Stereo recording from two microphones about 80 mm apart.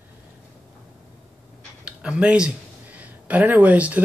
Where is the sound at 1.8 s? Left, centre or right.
Centre.